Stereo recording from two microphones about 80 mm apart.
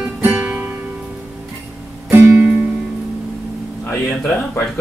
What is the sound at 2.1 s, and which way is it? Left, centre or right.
Music, right.